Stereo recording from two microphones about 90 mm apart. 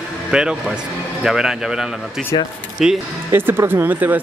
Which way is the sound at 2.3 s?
65° left (ahead or behind).